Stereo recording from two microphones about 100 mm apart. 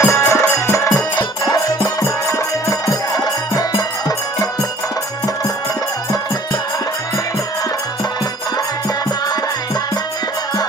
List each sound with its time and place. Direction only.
0.0 s music: 30° left (ahead or behind)